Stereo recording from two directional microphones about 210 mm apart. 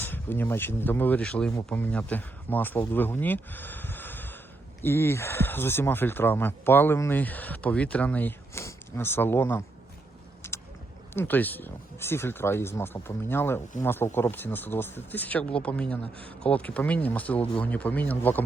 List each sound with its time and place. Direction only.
0.0 s speech: 10° left (ahead or behind)
10.4 s a sound: 10° left (ahead or behind)
11.1 s speech: 10° left (ahead or behind)